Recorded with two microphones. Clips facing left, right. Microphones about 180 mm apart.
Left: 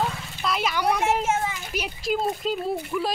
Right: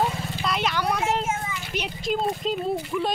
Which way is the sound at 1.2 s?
80° left.